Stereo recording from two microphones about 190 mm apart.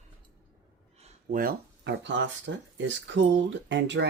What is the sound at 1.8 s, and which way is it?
Speech, 70° right (ahead or behind).